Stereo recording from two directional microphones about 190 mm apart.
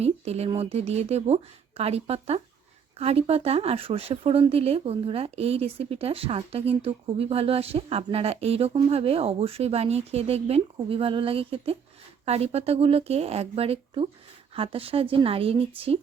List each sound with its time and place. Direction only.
0.0 s a woman's voice: 35° right (ahead or behind)